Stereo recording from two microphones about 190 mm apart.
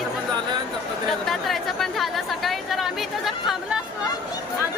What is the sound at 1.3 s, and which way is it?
Chatter, centre (ahead or behind).